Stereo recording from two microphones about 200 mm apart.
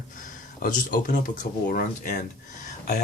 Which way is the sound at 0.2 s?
45° left (ahead or behind).